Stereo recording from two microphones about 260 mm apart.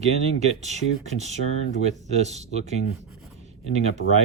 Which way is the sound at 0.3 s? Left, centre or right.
Right.